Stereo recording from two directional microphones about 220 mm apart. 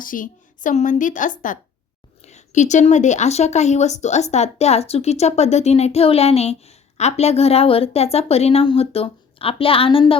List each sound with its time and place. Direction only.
0.0 s a woman's voice: 40° left (ahead or behind)